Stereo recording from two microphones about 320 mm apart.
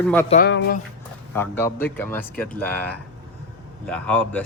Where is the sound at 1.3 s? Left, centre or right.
Centre.